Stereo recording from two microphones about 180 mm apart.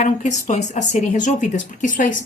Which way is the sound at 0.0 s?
45° left (ahead or behind).